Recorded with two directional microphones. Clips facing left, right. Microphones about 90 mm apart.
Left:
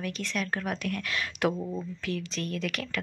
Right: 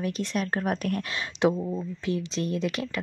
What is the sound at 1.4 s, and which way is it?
Speech, 20° right (ahead or behind).